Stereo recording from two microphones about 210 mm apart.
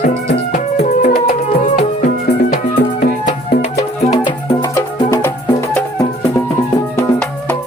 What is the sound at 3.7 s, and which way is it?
Music, 20° left (ahead or behind).